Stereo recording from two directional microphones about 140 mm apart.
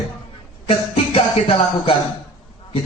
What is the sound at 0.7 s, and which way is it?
Music, 40° left (ahead or behind).